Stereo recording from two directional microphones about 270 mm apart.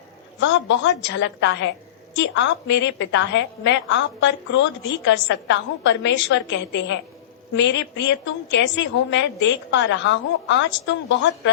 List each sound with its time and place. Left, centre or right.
0.3 s a woman's voice: left